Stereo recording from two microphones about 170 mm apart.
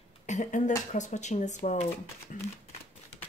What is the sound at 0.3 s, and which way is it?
Speech, 45° left (ahead or behind).